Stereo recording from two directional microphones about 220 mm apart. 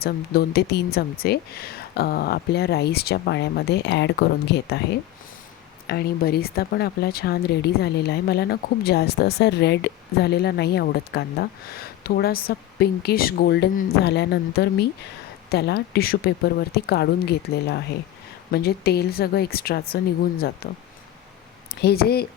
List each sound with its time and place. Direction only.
0.0 s speech: 45° left (ahead or behind)